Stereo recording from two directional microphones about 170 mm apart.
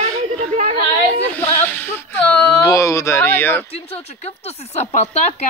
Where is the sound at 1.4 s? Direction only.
10° left (ahead or behind).